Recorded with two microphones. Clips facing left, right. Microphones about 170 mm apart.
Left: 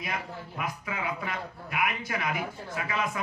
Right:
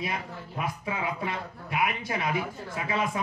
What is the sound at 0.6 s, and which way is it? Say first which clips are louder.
A man's voice: right 3 dB; 25° right (ahead or behind).